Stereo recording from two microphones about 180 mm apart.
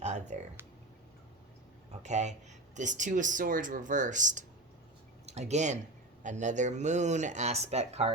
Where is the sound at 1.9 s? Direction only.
40° right (ahead or behind).